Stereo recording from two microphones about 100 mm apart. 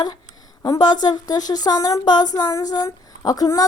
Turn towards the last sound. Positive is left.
turn(degrees=35)  # may be behind; listen again after turning